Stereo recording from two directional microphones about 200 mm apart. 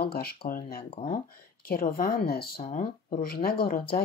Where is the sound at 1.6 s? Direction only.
45° left (ahead or behind).